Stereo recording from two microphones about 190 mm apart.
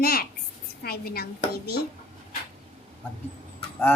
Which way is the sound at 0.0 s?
50° left (ahead or behind).